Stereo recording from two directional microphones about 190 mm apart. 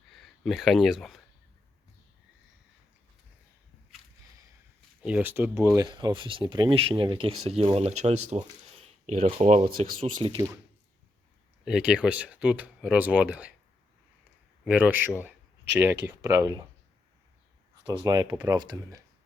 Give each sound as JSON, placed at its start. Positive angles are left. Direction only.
{"t": 0.1, "sound": "speech", "side_deg": 0}
{"t": 5.0, "sound": "speech", "side_deg": -10}
{"t": 10.2, "sound": "speech", "side_deg": -15}
{"t": 11.6, "sound": "speech", "side_deg": -5}
{"t": 14.6, "sound": "speech", "side_deg": -10}
{"t": 18.0, "sound": "speech", "side_deg": -20}